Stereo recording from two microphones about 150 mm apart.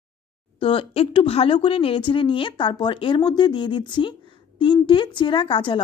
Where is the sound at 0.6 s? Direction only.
35° left (ahead or behind).